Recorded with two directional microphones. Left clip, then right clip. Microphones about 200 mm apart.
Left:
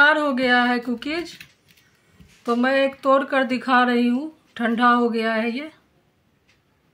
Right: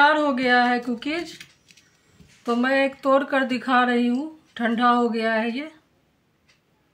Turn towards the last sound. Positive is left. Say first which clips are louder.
# even
turn(degrees=20)  # may be behind; listen again after turning